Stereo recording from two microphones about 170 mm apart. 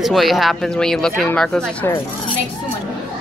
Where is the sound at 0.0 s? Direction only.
Centre (ahead or behind).